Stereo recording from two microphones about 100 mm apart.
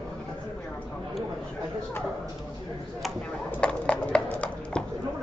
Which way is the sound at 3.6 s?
10° left (ahead or behind).